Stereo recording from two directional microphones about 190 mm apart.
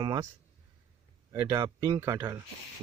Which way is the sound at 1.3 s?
15° right (ahead or behind).